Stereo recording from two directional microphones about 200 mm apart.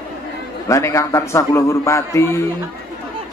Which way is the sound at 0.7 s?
15° left (ahead or behind).